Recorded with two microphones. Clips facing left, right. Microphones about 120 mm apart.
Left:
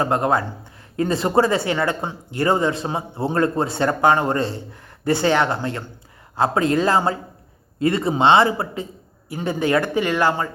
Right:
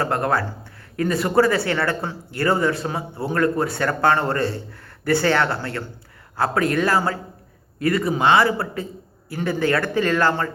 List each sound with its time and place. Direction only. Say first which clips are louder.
0.0 s a man's voice: left 2 dB; 20° left (ahead or behind)